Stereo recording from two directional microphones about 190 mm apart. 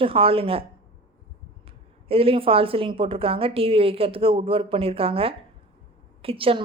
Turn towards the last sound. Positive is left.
turn(degrees=-30)  # may be behind; listen again after turning